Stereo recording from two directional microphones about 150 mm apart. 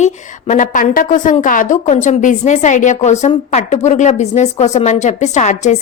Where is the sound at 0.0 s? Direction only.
55° left (ahead or behind).